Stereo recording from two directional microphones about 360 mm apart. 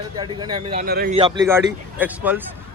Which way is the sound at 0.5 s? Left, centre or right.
Centre.